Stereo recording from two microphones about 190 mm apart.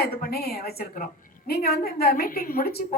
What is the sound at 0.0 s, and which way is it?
A man's voice, 55° left (ahead or behind).